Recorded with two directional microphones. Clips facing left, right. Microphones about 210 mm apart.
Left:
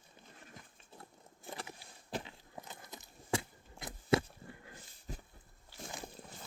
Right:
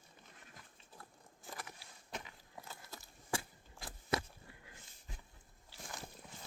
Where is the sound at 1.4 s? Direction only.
25° left (ahead or behind).